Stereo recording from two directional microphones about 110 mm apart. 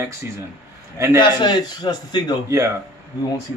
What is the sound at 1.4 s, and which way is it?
Speech, 40° left (ahead or behind).